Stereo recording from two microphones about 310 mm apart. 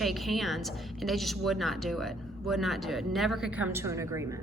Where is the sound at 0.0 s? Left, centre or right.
Centre.